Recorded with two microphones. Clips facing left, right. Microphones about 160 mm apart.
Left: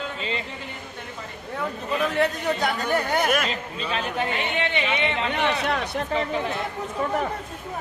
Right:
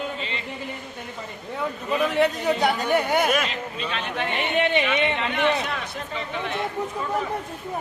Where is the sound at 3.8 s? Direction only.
35° left (ahead or behind).